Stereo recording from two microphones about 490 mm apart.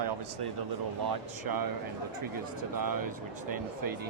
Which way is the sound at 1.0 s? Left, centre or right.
Right.